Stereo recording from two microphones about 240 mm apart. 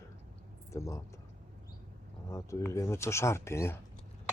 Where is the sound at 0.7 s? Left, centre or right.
Centre.